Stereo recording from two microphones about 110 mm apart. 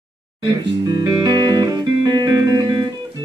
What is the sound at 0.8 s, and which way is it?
Music, 35° right (ahead or behind).